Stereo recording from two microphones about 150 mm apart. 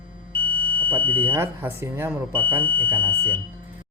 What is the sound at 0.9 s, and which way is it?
Speech, 15° right (ahead or behind).